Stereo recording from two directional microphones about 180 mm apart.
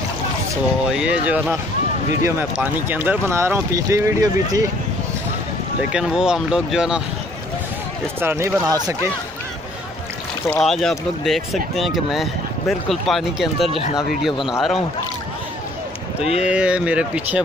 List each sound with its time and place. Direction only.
0.8 s speech: 5° right (ahead or behind)
5.8 s speech: 5° right (ahead or behind)
8.2 s speech: 10° right (ahead or behind)
10.6 s speech: centre (ahead or behind)
16.2 s speech: 35° left (ahead or behind)
16.4 s speech: 5° right (ahead or behind)